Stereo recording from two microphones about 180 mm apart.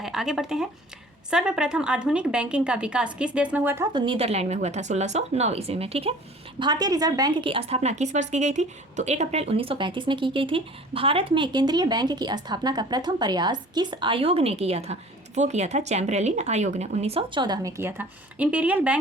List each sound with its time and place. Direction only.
0.0 s a woman's voice: centre (ahead or behind)
3.9 s speech: 30° right (ahead or behind)
6.6 s a woman's voice: 25° right (ahead or behind); by 18.9 s 5° right (ahead or behind)